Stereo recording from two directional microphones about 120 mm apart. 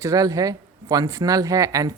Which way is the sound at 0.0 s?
30° right (ahead or behind).